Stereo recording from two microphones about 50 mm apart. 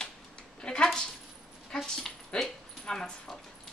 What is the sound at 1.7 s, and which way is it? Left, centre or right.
Dog, centre.